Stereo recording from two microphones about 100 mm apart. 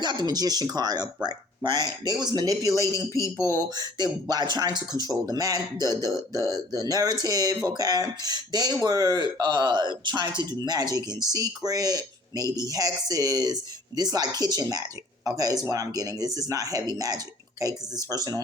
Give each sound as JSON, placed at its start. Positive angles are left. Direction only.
{"t": 0.0, "sound": "speech", "side_deg": -45}
{"t": 3.2, "sound": "speech", "side_deg": 25}
{"t": 3.5, "sound": "speech", "side_deg": -40}